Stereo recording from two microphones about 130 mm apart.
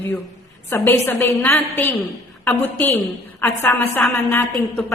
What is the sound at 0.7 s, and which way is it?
A woman's voice, 15° left (ahead or behind).